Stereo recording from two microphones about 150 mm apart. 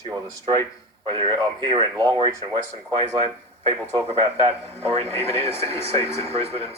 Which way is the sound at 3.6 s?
45° right (ahead or behind).